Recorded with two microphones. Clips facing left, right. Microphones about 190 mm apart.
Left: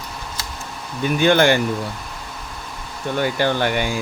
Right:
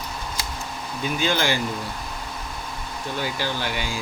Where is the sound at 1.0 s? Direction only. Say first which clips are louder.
Left 8 dB; 60° left (ahead or behind).